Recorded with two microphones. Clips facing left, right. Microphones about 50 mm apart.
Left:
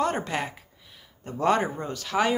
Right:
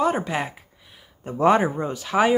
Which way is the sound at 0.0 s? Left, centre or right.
Centre.